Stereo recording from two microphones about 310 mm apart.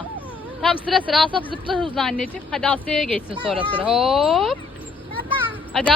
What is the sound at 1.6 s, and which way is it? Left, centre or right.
Speech, centre.